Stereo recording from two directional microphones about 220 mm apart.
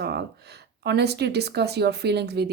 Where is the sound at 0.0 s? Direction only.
50° right (ahead or behind).